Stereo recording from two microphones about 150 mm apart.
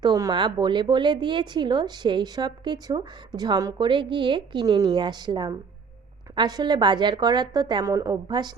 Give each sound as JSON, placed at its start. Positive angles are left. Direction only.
{"t": 0.0, "sound": "a woman's voice", "side_deg": -25}